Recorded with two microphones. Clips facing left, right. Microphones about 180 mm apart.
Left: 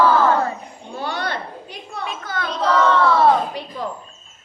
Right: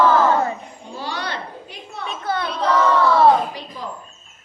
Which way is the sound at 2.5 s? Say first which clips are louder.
Left 1 dB; 10° right (ahead or behind).